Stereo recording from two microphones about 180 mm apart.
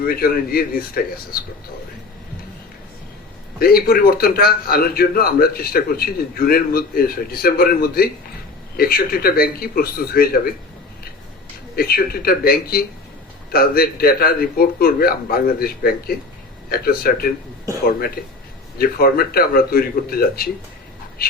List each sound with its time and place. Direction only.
0.1 s a man's voice: 55° left (ahead or behind)
3.6 s a man's voice: 55° left (ahead or behind)
11.8 s a man's voice: 55° left (ahead or behind)